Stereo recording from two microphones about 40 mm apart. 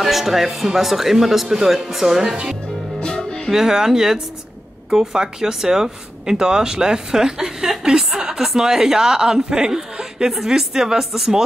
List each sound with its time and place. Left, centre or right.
0.0 s speech: centre
3.0 s music: left
3.5 s speech: centre